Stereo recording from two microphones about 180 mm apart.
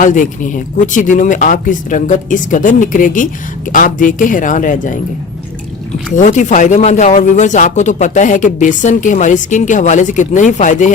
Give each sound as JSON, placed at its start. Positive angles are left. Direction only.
{"t": 0.0, "sound": "speech", "side_deg": 45}
{"t": 6.1, "sound": "speech", "side_deg": 45}